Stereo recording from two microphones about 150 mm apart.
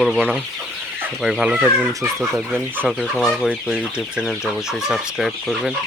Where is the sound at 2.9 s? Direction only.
Centre (ahead or behind).